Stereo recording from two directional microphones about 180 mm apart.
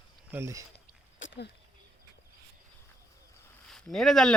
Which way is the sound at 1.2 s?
90° left.